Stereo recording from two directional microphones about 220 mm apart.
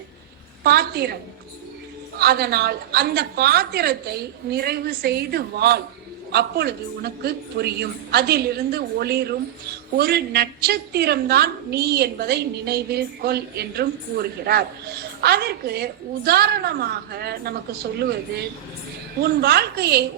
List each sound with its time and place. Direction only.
0.6 s a woman's voice: 45° right (ahead or behind)